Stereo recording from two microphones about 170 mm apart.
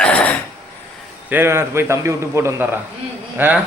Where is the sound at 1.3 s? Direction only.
15° right (ahead or behind).